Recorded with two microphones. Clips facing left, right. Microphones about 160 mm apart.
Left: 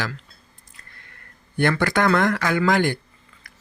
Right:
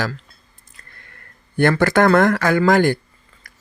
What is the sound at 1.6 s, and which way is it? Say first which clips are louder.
Speech: right 5 dB; 45° right (ahead or behind).